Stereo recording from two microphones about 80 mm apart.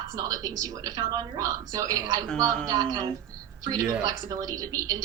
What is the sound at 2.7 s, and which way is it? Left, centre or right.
A woman's voice, right.